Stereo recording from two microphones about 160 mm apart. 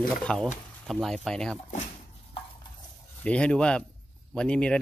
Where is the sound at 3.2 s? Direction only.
5° left (ahead or behind).